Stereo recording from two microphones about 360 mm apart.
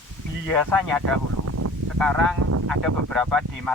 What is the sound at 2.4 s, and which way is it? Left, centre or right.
Speech, right.